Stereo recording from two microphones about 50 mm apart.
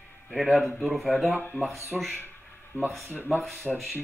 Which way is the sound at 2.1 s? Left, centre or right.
Left.